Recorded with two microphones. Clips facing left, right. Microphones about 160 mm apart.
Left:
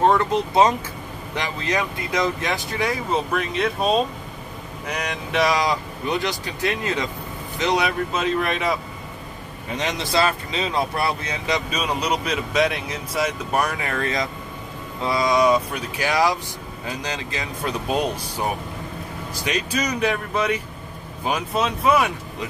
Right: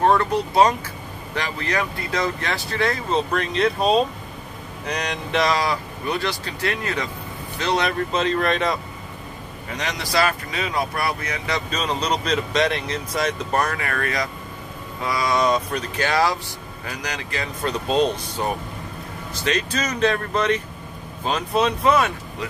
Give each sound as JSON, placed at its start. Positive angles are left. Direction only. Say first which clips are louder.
{"t": 0.0, "sound": "speech", "louder": "even", "side_deg": 20}
{"t": 7.8, "sound": "speech", "louder": "right 1 dB", "side_deg": 5}
{"t": 9.8, "sound": "speech", "louder": "left 1 dB", "side_deg": 20}
{"t": 15.3, "sound": "speech", "louder": "left 2 dB", "side_deg": 10}